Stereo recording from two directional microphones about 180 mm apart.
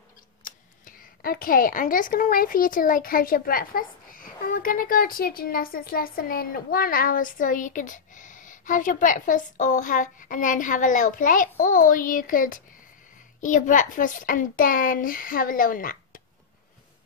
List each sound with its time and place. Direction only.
0.4 s speech: 50° left (ahead or behind)